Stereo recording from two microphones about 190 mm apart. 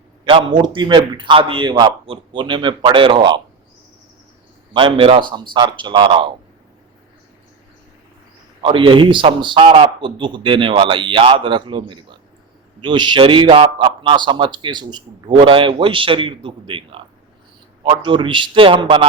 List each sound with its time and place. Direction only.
0.3 s a man's voice: 25° right (ahead or behind)
4.7 s a man's voice: 25° right (ahead or behind)
8.6 s a man's voice: 25° right (ahead or behind)